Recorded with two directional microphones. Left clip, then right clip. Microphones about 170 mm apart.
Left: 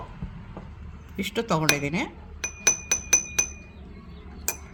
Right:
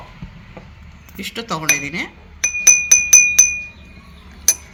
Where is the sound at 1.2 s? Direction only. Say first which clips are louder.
Right 1 dB; 90° left.